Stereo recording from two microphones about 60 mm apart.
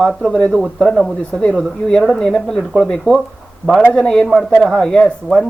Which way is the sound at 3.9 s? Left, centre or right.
Centre.